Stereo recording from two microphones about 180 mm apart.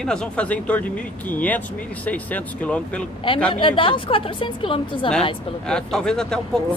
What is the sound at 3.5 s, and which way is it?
A woman's voice, 30° left (ahead or behind).